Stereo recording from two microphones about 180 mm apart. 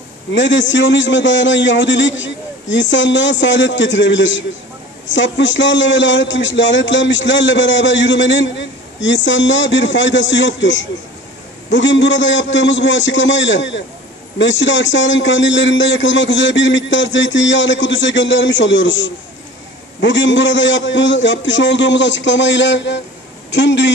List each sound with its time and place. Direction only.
0.3 s a man's voice: 90° left